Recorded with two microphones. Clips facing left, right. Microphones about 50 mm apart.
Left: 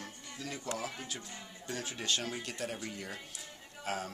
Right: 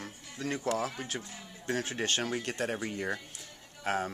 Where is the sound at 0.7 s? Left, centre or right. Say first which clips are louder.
Right 6 dB; right.